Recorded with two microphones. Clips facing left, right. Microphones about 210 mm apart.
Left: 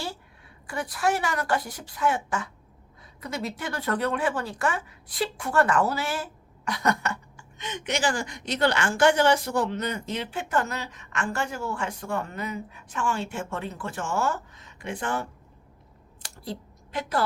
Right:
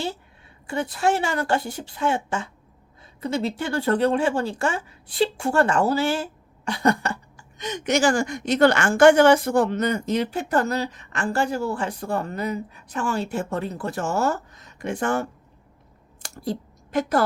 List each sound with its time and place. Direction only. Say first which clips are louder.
0.7 s a woman's voice: right 4 dB; 25° right (ahead or behind); by 17.2 s 45° right (ahead or behind)